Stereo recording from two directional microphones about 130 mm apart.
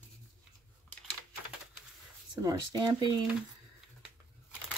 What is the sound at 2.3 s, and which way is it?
Speech, 30° right (ahead or behind).